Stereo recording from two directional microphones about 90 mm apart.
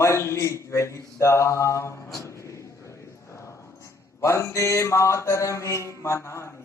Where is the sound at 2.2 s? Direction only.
35° left (ahead or behind).